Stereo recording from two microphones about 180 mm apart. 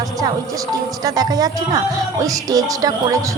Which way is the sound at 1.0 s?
20° right (ahead or behind).